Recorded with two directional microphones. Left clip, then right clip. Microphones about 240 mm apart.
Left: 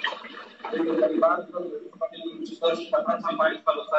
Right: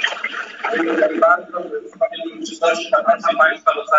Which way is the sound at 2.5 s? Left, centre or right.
Right.